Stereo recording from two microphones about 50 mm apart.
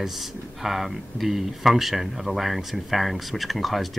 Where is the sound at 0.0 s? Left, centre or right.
Centre.